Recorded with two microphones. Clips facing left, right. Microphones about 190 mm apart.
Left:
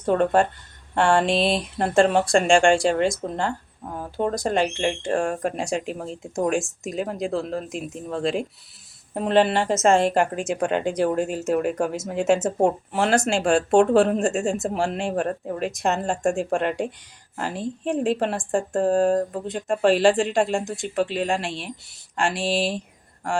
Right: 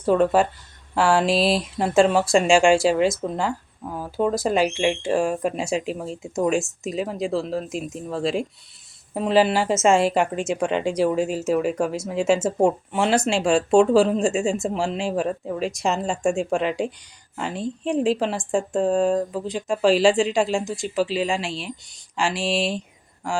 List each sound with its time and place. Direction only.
0.0 s a woman's voice: 5° right (ahead or behind)